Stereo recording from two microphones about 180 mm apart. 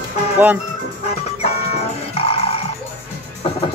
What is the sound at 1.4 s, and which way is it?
Music, 35° left (ahead or behind).